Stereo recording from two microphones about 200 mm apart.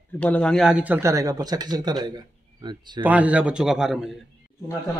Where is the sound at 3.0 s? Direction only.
10° right (ahead or behind).